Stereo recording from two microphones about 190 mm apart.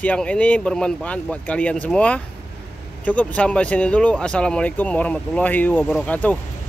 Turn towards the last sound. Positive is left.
turn(degrees=10)  # may be behind; listen again after turning